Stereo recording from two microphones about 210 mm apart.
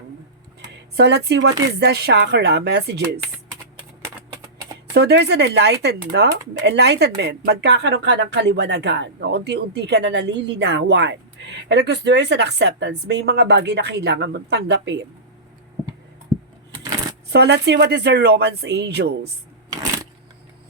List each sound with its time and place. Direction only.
0.9 s speech: 55° right (ahead or behind)
4.9 s speech: 50° right (ahead or behind)
16.3 s a sound: centre (ahead or behind)
17.3 s speech: 50° right (ahead or behind)